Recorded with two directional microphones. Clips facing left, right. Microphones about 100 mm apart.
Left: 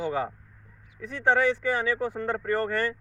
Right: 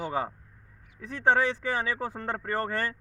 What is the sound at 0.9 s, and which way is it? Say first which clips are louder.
Speech: left 1 dB; 30° right (ahead or behind).